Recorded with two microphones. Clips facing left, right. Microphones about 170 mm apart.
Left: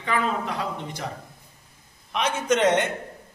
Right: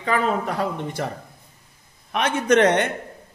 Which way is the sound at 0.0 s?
45° right (ahead or behind).